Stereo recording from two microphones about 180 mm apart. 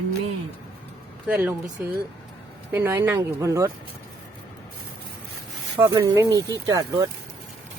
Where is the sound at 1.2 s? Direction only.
10° right (ahead or behind).